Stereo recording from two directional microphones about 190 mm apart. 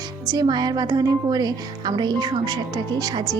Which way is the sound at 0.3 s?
20° right (ahead or behind).